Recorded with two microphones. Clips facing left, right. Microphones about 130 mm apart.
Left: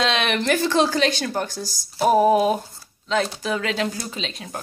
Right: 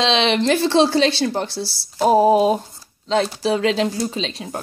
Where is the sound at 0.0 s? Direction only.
25° right (ahead or behind).